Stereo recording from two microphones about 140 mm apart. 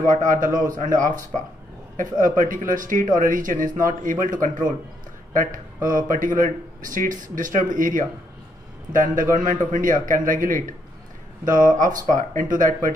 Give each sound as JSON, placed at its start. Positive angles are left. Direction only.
{"t": 0.1, "sound": "speech", "side_deg": -65}